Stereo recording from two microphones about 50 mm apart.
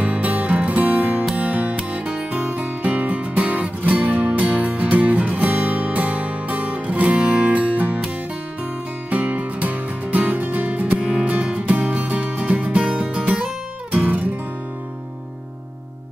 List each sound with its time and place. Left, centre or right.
0.0 s music: right
9.1 s music: right